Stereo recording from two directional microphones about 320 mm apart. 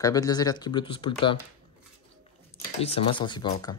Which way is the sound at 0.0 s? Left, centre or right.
Centre.